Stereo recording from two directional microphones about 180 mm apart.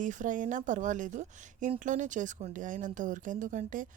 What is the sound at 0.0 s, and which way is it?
Speech, 45° right (ahead or behind).